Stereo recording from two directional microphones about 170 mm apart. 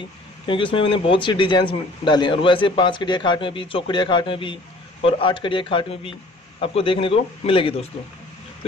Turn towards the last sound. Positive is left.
turn(degrees=30)  # may be behind; listen again after turning